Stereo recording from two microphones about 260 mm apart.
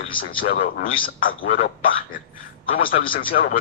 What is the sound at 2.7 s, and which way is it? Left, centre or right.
Speech, left.